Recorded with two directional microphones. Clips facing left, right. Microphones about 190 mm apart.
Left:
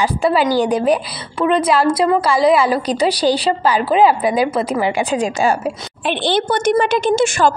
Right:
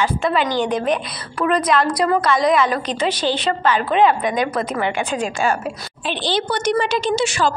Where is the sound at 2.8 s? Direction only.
35° left (ahead or behind).